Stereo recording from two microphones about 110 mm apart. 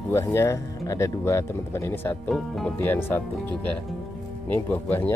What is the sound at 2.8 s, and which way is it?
Speech, 20° left (ahead or behind).